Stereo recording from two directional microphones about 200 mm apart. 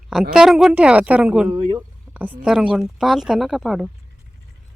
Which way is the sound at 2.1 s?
10° right (ahead or behind).